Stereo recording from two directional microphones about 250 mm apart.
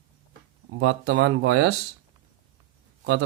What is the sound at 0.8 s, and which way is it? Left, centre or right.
Speech, right.